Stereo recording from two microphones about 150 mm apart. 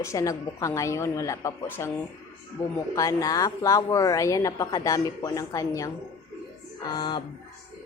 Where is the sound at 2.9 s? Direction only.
20° left (ahead or behind).